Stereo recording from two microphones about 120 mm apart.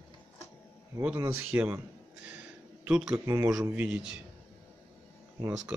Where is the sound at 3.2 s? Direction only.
25° right (ahead or behind).